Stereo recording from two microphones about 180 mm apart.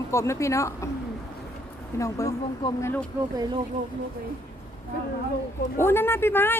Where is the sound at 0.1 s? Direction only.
15° left (ahead or behind).